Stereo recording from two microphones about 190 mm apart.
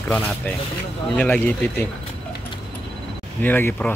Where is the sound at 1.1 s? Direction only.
10° left (ahead or behind).